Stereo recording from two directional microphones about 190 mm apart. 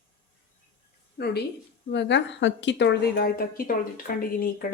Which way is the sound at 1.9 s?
70° left (ahead or behind).